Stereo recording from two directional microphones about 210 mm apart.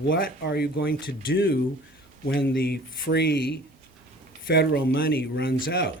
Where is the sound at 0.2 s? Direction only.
50° left (ahead or behind).